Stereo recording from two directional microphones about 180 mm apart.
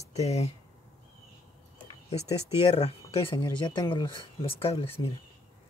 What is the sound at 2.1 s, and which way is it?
Speech, 35° left (ahead or behind).